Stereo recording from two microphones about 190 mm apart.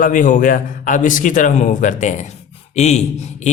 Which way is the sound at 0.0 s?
45° left (ahead or behind).